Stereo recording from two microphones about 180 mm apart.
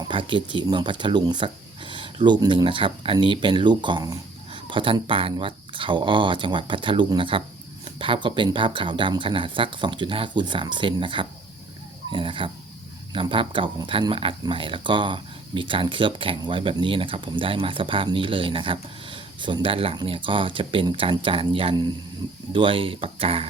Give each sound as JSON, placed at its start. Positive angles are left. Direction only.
{"t": 0.1, "sound": "speech", "side_deg": -25}